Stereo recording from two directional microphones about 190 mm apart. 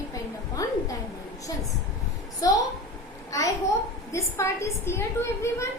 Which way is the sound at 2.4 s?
20° left (ahead or behind).